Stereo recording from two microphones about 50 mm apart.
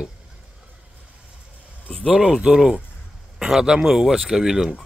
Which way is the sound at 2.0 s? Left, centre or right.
Centre.